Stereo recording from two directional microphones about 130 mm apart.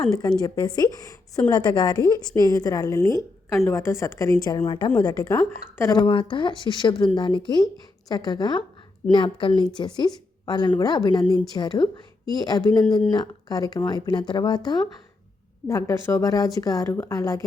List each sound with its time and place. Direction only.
0.1 s a woman's voice: 30° left (ahead or behind)
4.6 s a woman's voice: 40° left (ahead or behind)
4.9 s a woman's voice: 30° left (ahead or behind)
5.4 s a woman's voice: 20° left (ahead or behind)
5.9 s a woman's voice: 35° left (ahead or behind)
15.6 s a woman's voice: 25° left (ahead or behind)